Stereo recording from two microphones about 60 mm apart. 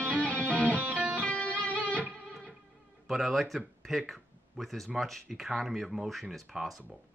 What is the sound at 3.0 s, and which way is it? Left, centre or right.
Speech, centre.